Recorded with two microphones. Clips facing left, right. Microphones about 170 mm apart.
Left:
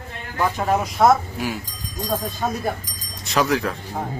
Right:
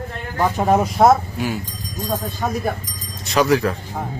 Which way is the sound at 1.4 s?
Centre (ahead or behind).